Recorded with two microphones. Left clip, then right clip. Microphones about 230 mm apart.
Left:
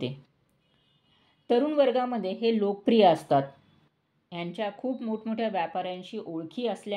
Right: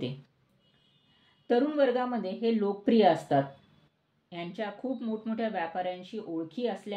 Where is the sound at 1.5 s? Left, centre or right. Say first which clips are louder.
Left 2 dB; left.